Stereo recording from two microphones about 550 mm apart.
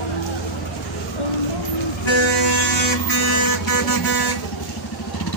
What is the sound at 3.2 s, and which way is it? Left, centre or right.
Vehicle, left.